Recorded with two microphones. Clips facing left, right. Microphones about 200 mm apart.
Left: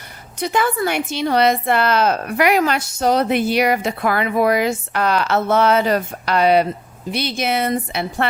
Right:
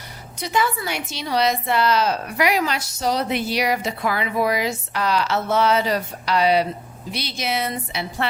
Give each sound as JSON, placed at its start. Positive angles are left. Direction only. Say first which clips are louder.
{"t": 0.3, "sound": "a woman's voice", "louder": "left 4 dB", "side_deg": 55}